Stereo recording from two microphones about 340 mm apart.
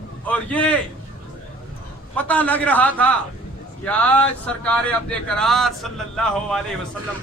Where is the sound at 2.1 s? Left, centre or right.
Centre.